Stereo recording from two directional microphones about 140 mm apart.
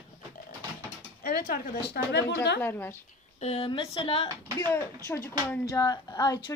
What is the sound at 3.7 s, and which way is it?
Speech, 40° left (ahead or behind).